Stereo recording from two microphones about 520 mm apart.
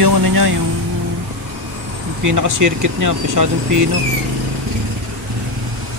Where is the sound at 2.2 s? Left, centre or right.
Right.